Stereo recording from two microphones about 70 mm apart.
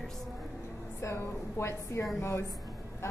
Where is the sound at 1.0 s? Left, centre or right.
Left.